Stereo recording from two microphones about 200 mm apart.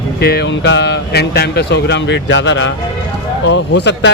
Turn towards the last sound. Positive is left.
turn(degrees=60)  # may be behind; listen again after turning